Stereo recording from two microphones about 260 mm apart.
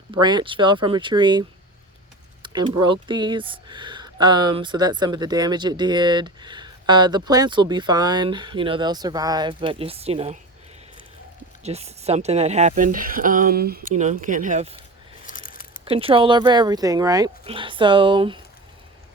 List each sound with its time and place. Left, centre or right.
0.1 s speech: centre
2.4 s keys jangling: centre
2.8 s speech: centre
11.6 s speech: right
15.3 s a sound: left
15.8 s speech: right